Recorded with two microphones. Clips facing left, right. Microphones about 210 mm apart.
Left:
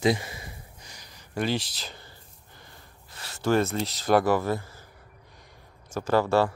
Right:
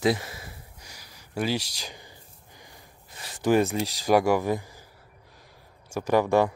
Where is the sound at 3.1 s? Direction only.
15° right (ahead or behind).